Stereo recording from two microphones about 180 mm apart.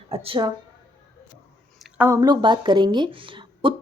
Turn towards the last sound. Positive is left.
turn(degrees=-30)  # may be behind; listen again after turning